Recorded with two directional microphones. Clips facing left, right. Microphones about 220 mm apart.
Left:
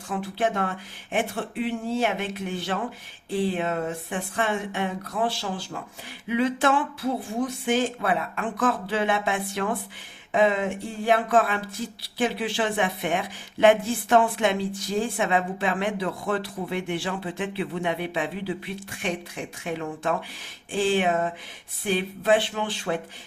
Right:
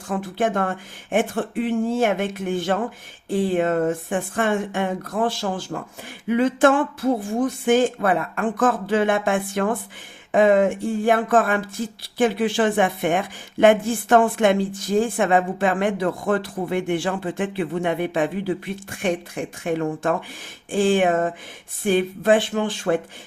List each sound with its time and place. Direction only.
0.1 s speech: 50° right (ahead or behind)